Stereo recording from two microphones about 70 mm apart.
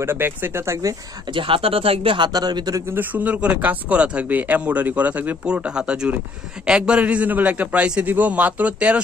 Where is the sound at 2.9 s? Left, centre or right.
Right.